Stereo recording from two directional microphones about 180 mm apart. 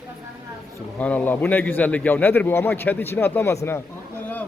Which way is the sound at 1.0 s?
10° left (ahead or behind).